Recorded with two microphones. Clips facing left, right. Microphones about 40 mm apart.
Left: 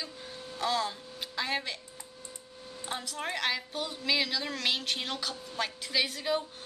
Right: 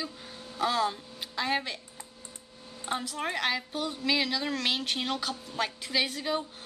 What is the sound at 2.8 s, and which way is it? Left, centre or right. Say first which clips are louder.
A woman's voice: right 4 dB; centre.